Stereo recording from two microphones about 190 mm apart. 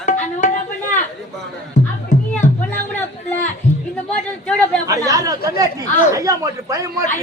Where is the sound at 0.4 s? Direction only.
40° left (ahead or behind).